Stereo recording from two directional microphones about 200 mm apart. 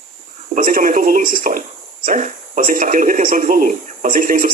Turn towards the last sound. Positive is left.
turn(degrees=-45)  # may be behind; listen again after turning